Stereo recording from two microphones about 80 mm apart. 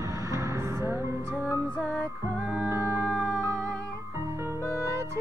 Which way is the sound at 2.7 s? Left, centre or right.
Right.